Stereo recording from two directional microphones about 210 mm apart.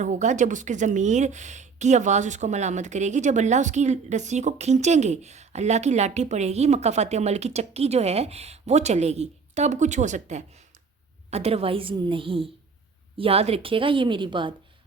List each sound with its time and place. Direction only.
0.0 s a woman's voice: 35° right (ahead or behind)